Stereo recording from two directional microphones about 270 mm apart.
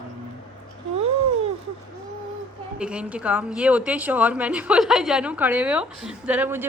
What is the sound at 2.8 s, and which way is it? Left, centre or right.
Speech, centre.